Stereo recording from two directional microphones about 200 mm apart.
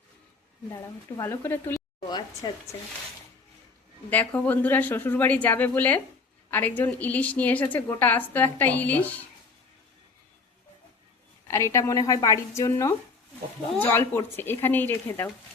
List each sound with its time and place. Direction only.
1.2 s a woman's voice: 10° left (ahead or behind)
4.1 s a woman's voice: 10° left (ahead or behind)
11.5 s a woman's voice: 15° left (ahead or behind)